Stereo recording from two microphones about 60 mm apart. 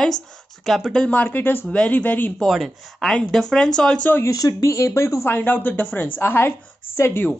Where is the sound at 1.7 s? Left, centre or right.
Left.